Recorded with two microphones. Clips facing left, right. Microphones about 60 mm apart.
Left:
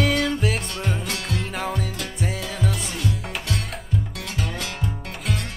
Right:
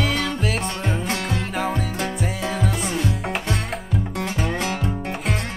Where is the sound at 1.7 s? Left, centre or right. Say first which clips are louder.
Right 4 dB; right.